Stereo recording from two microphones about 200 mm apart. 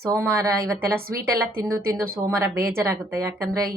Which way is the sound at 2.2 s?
15° right (ahead or behind).